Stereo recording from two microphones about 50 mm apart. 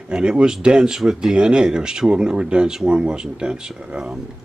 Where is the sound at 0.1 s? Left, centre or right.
Centre.